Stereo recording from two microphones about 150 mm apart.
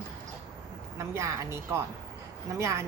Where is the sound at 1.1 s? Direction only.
20° right (ahead or behind).